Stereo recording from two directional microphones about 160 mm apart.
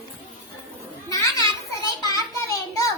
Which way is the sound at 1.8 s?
20° left (ahead or behind).